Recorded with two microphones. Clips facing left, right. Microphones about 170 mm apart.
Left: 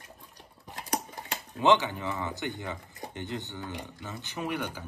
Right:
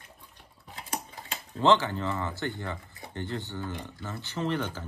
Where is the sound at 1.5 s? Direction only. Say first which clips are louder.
Right 1 dB; 20° left (ahead or behind).